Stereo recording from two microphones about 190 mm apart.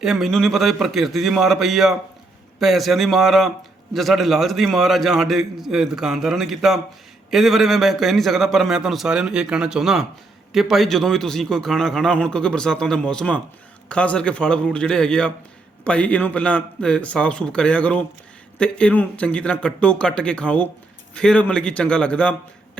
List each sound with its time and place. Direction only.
0.0 s a man's voice: centre (ahead or behind)